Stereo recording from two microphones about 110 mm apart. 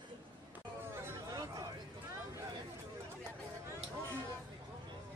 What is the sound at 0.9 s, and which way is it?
Chatter, 25° right (ahead or behind).